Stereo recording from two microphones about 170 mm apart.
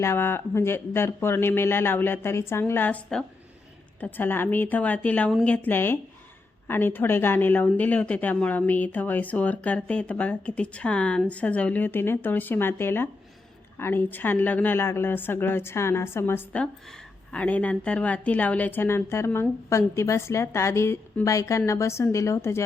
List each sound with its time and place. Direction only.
0.0 s a woman's voice: 15° left (ahead or behind)